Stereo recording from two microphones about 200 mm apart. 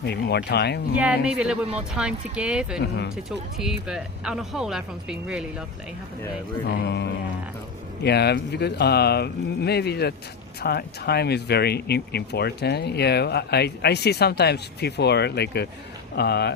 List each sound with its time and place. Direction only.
0.0 s speech: 55° left (ahead or behind)
0.9 s speech: 5° right (ahead or behind)
2.7 s speech: 55° left (ahead or behind)
3.2 s speech: centre (ahead or behind)
6.7 s speech: 55° left (ahead or behind)